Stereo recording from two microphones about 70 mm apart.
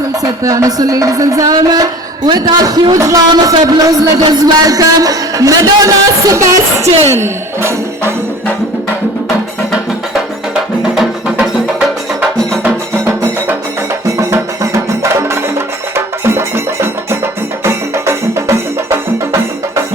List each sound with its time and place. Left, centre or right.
0.2 s speech: right
1.5 s speech: right
12.6 s music: right
17.6 s music: right